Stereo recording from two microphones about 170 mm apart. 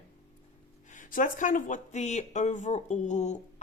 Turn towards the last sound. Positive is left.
turn(degrees=45)  # may be behind; listen again after turning